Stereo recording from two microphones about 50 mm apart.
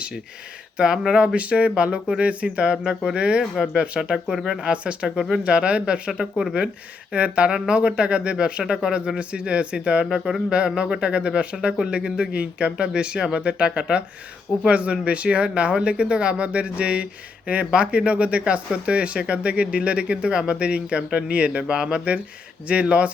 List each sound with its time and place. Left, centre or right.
0.8 s speech: centre
3.9 s speech: centre
7.1 s speech: right